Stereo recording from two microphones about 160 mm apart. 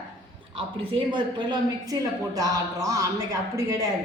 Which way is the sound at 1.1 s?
30° right (ahead or behind).